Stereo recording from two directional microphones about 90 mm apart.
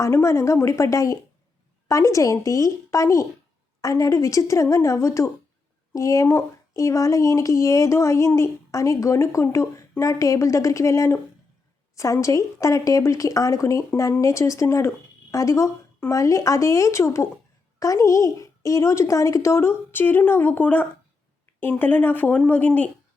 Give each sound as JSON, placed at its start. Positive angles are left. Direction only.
{"t": 0.0, "sound": "speech", "side_deg": 35}